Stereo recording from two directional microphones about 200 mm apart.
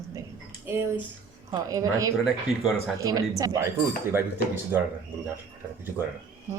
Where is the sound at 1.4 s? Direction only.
15° right (ahead or behind).